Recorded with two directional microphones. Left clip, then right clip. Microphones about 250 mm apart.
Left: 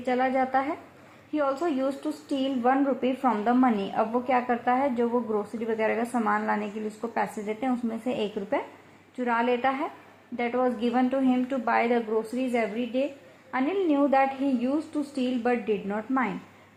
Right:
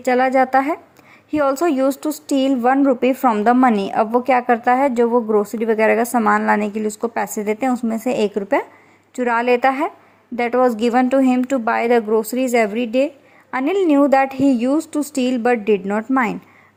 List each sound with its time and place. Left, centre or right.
0.0 s speech: right